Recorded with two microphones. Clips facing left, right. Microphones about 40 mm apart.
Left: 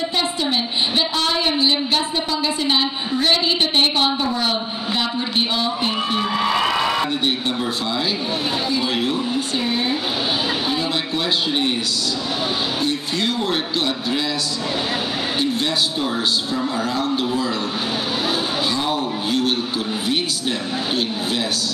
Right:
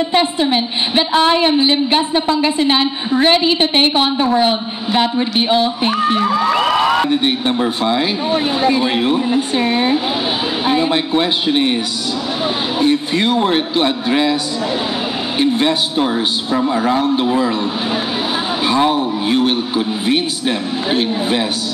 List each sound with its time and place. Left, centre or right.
0.1 s a woman's voice: right
5.9 s a woman's voice: right
12.8 s a woman's voice: right
15.3 s a woman's voice: right
18.7 s a woman's voice: right